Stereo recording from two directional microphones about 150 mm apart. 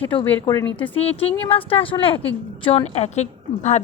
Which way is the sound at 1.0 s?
40° left (ahead or behind).